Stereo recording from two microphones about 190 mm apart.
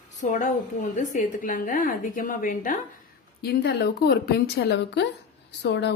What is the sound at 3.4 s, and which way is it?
A woman's voice, 55° left (ahead or behind).